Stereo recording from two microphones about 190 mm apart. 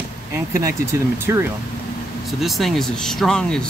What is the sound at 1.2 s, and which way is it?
Speech, 10° right (ahead or behind).